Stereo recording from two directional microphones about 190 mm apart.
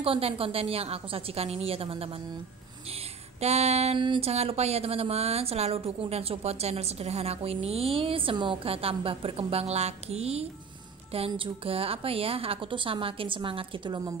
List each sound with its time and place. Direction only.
0.0 s speech: 30° right (ahead or behind)
3.3 s a woman's voice: 35° right (ahead or behind)